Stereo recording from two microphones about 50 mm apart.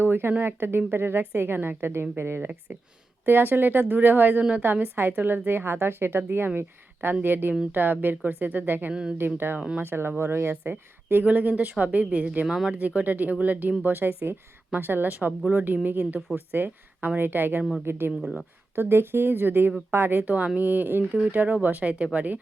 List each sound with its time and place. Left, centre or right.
0.0 s a woman's voice: right
8.9 s speech: centre
9.1 s a woman's voice: right
9.6 s speech: right
9.8 s a woman's voice: right
10.5 s a woman's voice: right
12.5 s speech: centre
12.7 s a woman's voice: right
20.2 s a woman's voice: right